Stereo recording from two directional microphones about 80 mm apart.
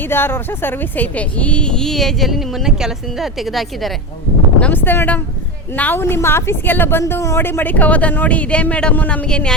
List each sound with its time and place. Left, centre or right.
0.0 s speech: left; by 3.9 s centre
4.6 s speech: left